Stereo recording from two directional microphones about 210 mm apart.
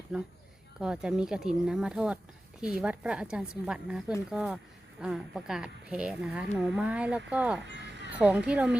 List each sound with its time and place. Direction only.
0.1 s speech: 5° right (ahead or behind)
7.6 s a sound: 55° right (ahead or behind)
8.1 s speech: 5° right (ahead or behind)